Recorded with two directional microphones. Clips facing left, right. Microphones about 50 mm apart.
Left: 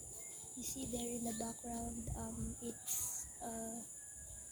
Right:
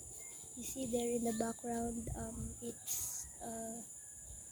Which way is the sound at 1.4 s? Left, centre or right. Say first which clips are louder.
Right 6 dB; right.